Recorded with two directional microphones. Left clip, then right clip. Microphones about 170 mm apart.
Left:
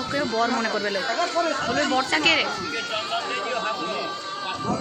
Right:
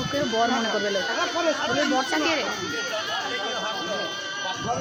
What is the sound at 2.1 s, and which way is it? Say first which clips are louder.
Speech: left 4 dB; 15° right (ahead or behind).